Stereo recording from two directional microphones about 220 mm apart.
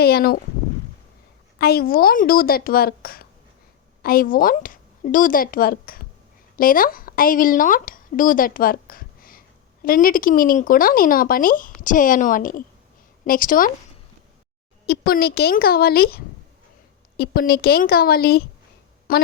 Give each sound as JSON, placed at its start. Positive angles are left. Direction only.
{"t": 0.0, "sound": "speech", "side_deg": 45}
{"t": 1.5, "sound": "a woman's voice", "side_deg": 45}
{"t": 14.8, "sound": "speech", "side_deg": 45}